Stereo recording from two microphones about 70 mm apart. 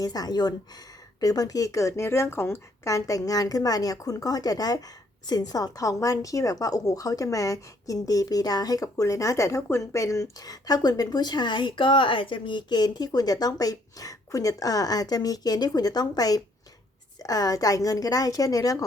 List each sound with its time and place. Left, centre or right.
0.0 s a woman's voice: left
2.8 s a woman's voice: left
12.5 s a woman's voice: left